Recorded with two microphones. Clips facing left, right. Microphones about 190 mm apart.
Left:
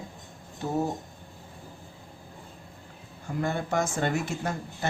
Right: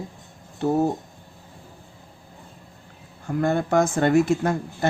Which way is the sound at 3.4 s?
55° right (ahead or behind).